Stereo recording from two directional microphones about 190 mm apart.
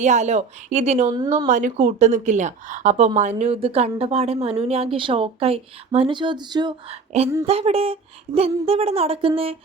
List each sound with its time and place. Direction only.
0.0 s speech: 40° right (ahead or behind)